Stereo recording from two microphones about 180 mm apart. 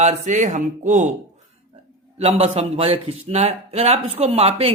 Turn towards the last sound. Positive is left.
turn(degrees=-35)  # may be behind; listen again after turning